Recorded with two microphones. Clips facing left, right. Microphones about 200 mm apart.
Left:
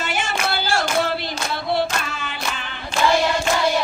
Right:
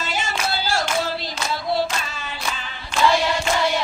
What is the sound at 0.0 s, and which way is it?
Clapping, 55° left (ahead or behind).